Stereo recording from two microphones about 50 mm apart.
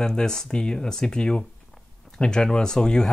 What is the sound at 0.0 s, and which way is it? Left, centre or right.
Speech, centre.